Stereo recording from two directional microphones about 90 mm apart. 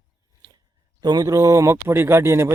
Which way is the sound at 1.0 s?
45° right (ahead or behind).